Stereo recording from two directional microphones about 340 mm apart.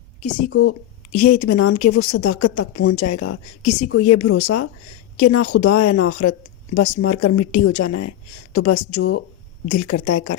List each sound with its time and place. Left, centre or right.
0.2 s speech: left